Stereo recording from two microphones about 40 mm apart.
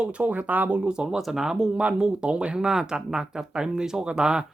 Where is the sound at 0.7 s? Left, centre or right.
Right.